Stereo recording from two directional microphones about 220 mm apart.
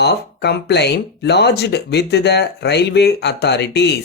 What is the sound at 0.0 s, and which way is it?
Speech, 50° left (ahead or behind).